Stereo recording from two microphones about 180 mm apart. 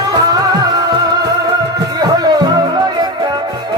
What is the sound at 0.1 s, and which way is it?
Music, 20° right (ahead or behind).